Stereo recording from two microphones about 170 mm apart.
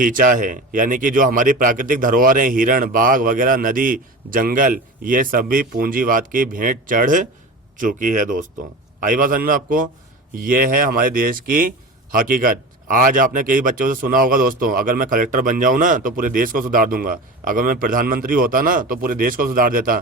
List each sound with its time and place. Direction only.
0.0 s speech: 50° right (ahead or behind)